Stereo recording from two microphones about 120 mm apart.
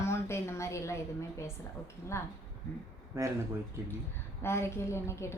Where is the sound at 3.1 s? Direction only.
25° right (ahead or behind).